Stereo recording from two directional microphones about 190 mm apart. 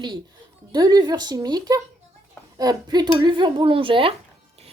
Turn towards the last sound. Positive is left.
turn(degrees=-30)  # may be behind; listen again after turning